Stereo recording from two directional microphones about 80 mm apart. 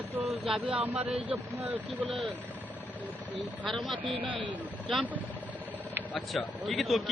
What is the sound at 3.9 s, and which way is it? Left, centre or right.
Speech, right.